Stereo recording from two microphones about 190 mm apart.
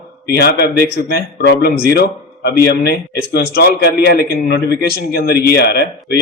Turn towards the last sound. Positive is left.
turn(degrees=60)  # may be behind; listen again after turning